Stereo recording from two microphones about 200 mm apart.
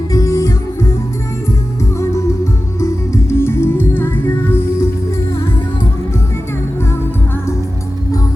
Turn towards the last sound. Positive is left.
turn(degrees=10)  # may be behind; listen again after turning